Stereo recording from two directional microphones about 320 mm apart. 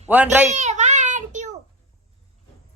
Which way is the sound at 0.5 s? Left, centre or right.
Right.